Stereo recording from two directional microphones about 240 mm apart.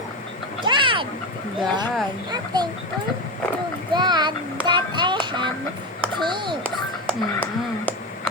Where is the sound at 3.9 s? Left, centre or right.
Centre.